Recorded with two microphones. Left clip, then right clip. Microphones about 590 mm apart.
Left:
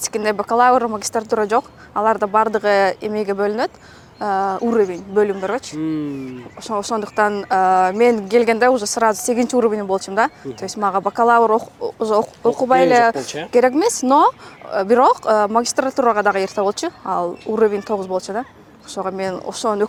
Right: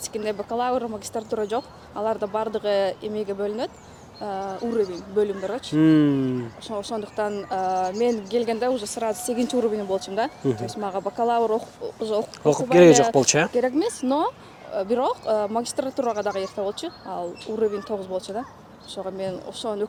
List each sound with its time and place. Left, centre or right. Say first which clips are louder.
0.0 s speech: left 8 dB; left
5.7 s speech: right 6 dB; right
6.7 s speech: left 10 dB; left
12.7 s speech: left 1 dB; right
13.5 s speech: left 8 dB; left